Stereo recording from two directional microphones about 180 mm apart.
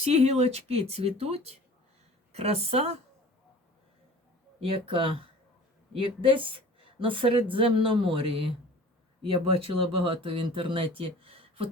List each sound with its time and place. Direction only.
0.1 s speech: 35° right (ahead or behind)
4.6 s speech: 30° right (ahead or behind)